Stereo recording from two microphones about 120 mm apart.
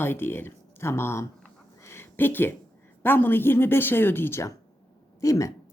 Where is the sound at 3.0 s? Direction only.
15° left (ahead or behind).